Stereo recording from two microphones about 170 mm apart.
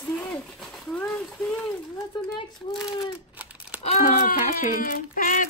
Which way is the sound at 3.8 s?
50° left (ahead or behind).